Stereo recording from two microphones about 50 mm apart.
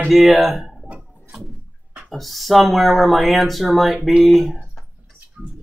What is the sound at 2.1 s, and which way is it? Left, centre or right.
Speech, centre.